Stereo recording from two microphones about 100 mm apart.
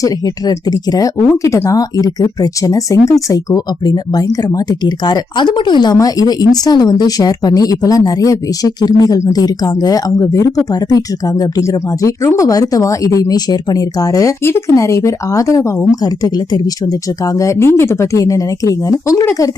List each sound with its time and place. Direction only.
0.0 s speech: 40° left (ahead or behind)